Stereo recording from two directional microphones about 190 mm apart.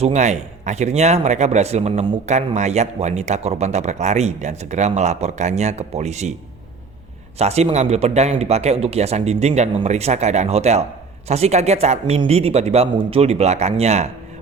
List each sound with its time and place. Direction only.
0.0 s speech: 35° right (ahead or behind)
7.3 s speech: 35° right (ahead or behind)